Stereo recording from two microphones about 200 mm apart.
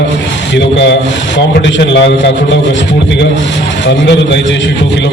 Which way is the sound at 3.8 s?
60° left (ahead or behind).